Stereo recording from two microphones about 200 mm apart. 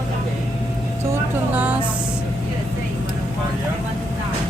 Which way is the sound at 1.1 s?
10° right (ahead or behind).